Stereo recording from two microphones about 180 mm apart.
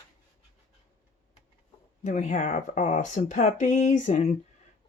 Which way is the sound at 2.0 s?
40° left (ahead or behind).